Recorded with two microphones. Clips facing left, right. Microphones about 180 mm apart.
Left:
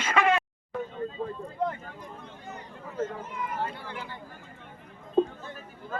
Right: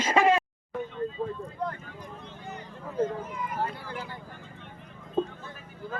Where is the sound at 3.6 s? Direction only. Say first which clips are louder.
Right 1 dB; 40° right (ahead or behind).